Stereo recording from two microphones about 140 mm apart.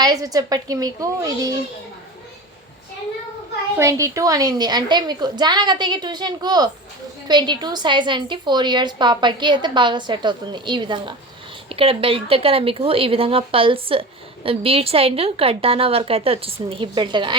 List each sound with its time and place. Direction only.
0.0 s a woman's voice: 25° right (ahead or behind)
3.8 s a woman's voice: 20° right (ahead or behind)